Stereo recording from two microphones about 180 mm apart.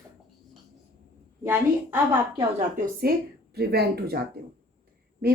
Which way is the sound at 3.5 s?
60° right (ahead or behind).